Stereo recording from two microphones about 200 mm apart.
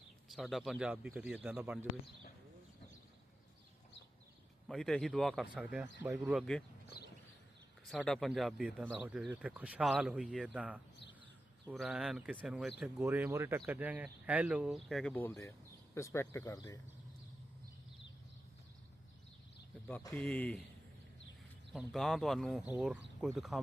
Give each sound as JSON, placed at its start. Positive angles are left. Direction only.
{"t": 0.3, "sound": "speech", "side_deg": 0}
{"t": 4.7, "sound": "speech", "side_deg": 0}
{"t": 7.9, "sound": "speech", "side_deg": 0}
{"t": 20.0, "sound": "speech", "side_deg": 15}
{"t": 20.2, "sound": "speech", "side_deg": 5}
{"t": 21.7, "sound": "speech", "side_deg": 0}